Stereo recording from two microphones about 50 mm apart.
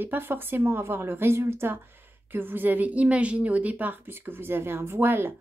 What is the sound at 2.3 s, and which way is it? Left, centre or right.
A woman's voice, right.